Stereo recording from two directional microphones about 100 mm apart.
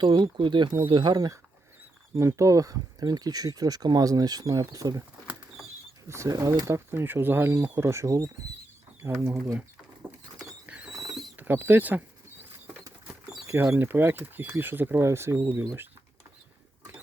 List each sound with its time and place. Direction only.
0.0 s speech: 50° right (ahead or behind)
2.1 s speech: 30° right (ahead or behind)
6.1 s speech: 30° right (ahead or behind)
10.1 s rodents: 15° right (ahead or behind)
10.9 s rodents: centre (ahead or behind)
11.3 s speech: 20° right (ahead or behind)
13.7 s speech: 20° right (ahead or behind)